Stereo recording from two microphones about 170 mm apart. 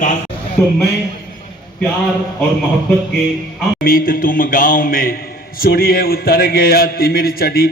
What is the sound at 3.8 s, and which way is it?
A man's voice, 60° left (ahead or behind).